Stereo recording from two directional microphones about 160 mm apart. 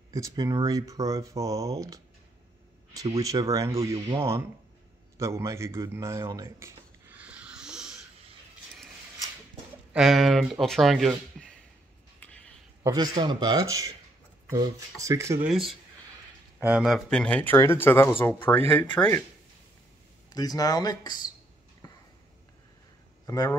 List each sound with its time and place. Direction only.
0.1 s speech: 20° right (ahead or behind)
3.9 s speech: 35° right (ahead or behind)
5.1 s a sound: 20° right (ahead or behind)
9.9 s speech: centre (ahead or behind)
12.8 s speech: 25° right (ahead or behind)
15.4 s speech: centre (ahead or behind)
20.3 s speech: 25° left (ahead or behind)
23.2 s speech: 25° left (ahead or behind)